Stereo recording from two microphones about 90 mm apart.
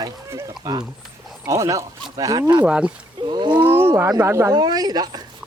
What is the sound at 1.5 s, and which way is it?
Speech, 35° right (ahead or behind).